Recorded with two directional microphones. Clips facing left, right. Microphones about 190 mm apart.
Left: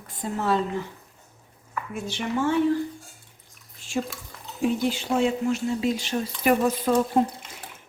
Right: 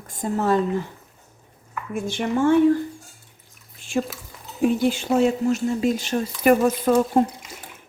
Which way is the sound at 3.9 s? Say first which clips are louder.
Right 4 dB; 55° right (ahead or behind).